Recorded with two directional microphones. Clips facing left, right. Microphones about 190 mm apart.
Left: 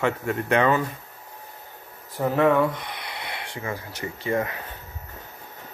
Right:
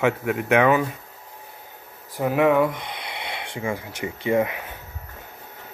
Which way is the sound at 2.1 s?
10° right (ahead or behind).